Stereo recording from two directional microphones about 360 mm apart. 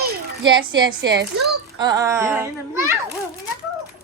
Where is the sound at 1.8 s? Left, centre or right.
Centre.